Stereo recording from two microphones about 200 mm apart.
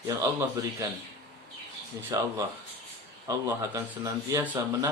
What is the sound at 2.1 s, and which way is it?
Speech, 15° right (ahead or behind).